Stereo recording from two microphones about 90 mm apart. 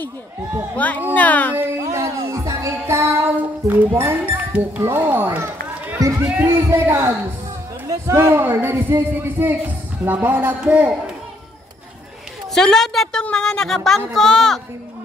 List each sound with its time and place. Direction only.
0.7 s speech: 15° left (ahead or behind)
1.6 s music: 30° right (ahead or behind)
4.6 s a man's voice: 25° right (ahead or behind)
12.5 s speech: 5° left (ahead or behind)